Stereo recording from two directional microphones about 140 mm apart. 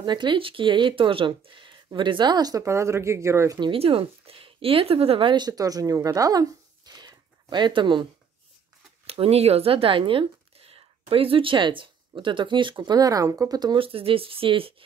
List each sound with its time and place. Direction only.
0.0 s speech: 35° right (ahead or behind)
3.5 s speech: 40° right (ahead or behind)